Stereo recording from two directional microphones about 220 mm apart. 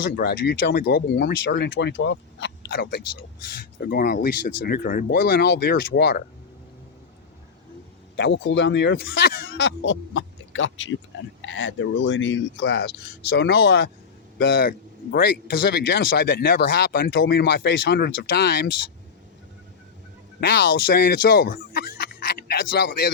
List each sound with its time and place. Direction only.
0.2 s a man's voice: 45° left (ahead or behind)
8.1 s a man's voice: 50° left (ahead or behind)
20.5 s speech: 55° left (ahead or behind)